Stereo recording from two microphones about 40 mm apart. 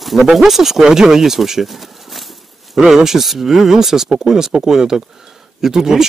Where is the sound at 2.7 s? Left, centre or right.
Centre.